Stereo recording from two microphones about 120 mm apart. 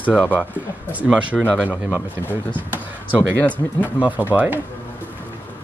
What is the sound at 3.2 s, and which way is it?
Speech, 15° left (ahead or behind).